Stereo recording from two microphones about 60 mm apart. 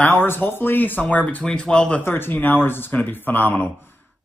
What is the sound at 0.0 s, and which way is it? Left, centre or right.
Speech, left.